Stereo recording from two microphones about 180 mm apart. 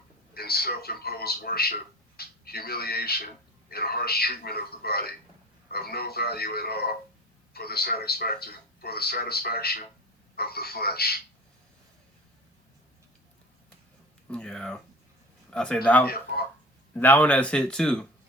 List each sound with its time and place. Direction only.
0.3 s a man's voice: 60° left (ahead or behind)
14.3 s speech: 5° left (ahead or behind)